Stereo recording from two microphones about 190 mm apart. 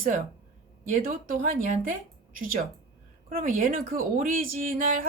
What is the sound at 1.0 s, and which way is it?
Speech, 50° right (ahead or behind).